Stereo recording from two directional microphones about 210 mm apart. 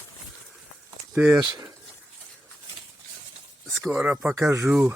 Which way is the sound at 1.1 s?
15° right (ahead or behind).